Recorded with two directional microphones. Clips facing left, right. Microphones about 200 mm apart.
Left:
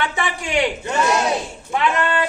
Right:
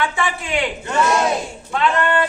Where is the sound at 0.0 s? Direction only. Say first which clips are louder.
Right 2 dB; 20° left (ahead or behind).